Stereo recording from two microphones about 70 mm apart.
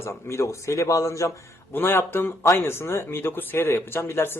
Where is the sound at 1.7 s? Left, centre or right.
Left.